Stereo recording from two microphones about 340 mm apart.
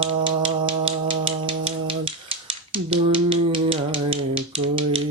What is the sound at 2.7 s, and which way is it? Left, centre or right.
Rattle, centre.